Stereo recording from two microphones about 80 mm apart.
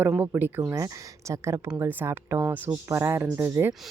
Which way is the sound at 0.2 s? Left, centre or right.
Right.